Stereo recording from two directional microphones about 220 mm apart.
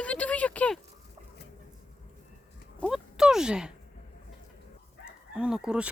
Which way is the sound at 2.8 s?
5° right (ahead or behind).